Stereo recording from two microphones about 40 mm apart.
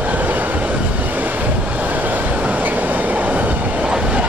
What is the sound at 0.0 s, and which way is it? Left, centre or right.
Vehicle, right.